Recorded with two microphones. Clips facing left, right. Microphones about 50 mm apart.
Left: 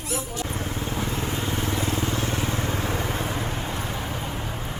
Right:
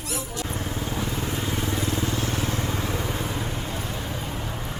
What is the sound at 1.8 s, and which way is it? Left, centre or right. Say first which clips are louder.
Vehicle: left 1 dB; left.